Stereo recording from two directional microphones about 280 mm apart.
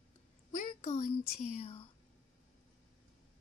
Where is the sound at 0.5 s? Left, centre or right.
Left.